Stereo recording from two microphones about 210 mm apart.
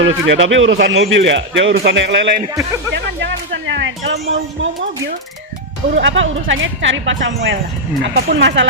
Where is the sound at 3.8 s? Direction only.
55° right (ahead or behind).